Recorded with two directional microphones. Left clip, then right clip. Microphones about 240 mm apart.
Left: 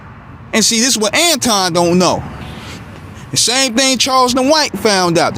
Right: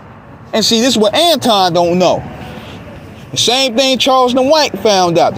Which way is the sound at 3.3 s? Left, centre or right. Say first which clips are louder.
Right 2 dB; left.